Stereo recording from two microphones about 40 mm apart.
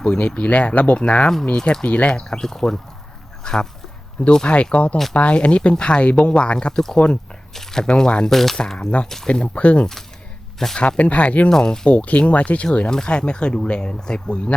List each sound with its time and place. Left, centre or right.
0.0 s speech: left
1.5 s speech: centre
1.8 s speech: left
2.3 s speech: centre
7.5 s speech: centre
7.9 s speech: left
8.3 s speech: centre
9.2 s speech: left
11.4 s speech: centre
11.9 s speech: left
12.9 s speech: left